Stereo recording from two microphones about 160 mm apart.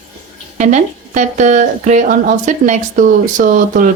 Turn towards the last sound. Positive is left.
turn(degrees=-55)  # may be behind; listen again after turning